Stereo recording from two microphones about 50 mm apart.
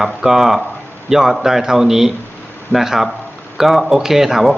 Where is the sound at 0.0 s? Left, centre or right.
Centre.